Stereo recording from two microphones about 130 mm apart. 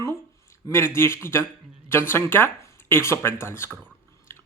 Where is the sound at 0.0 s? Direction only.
20° left (ahead or behind).